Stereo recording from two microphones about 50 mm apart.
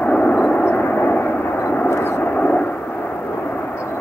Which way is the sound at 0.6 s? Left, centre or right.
Left.